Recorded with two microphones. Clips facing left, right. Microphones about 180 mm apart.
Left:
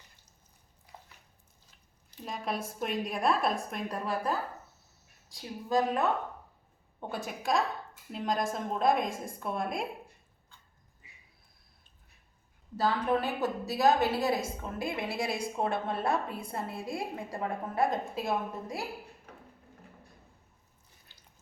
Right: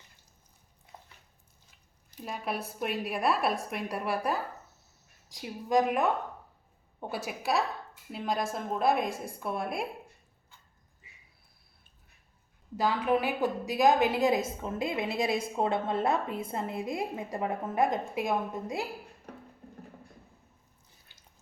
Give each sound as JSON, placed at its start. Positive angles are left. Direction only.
{"t": 2.2, "sound": "a woman's voice", "side_deg": -5}
{"t": 7.3, "sound": "a woman's voice", "side_deg": -5}
{"t": 12.7, "sound": "a woman's voice", "side_deg": -10}
{"t": 21.1, "sound": "water tap", "side_deg": -15}